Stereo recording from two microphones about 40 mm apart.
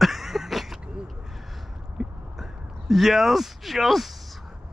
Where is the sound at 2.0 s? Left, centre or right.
Centre.